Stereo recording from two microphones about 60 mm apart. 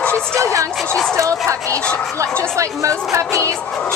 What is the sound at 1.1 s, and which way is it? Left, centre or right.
Speech, right.